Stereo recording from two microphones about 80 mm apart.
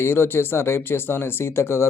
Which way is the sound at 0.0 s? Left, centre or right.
Left.